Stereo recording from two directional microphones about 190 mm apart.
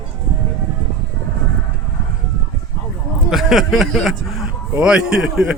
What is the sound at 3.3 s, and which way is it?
Speech, centre (ahead or behind).